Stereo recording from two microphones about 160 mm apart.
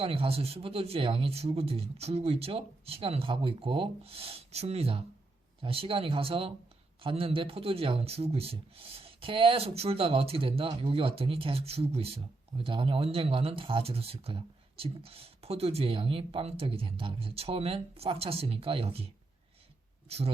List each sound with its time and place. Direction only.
0.0 s speech: 35° right (ahead or behind)